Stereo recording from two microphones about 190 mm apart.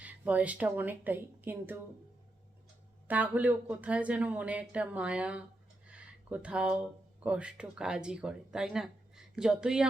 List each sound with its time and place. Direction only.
0.0 s speech: 10° right (ahead or behind)
3.1 s speech: 10° right (ahead or behind)